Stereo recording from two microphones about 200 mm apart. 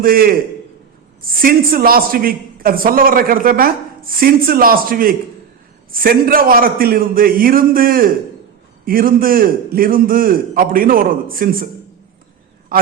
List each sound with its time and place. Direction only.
0.0 s a man's voice: 45° right (ahead or behind)
12.7 s a man's voice: 45° right (ahead or behind)